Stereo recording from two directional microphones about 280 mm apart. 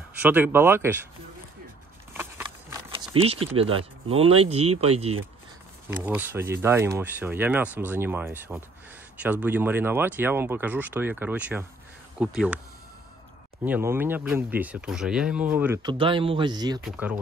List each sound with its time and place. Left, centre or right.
0.2 s speech: centre
2.1 s a sound: centre
3.5 s speech: centre
5.9 s speech: centre
13.7 s speech: centre
16.8 s speech: centre